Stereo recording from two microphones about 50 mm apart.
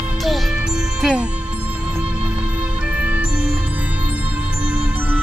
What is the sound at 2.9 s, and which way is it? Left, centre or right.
Music, right.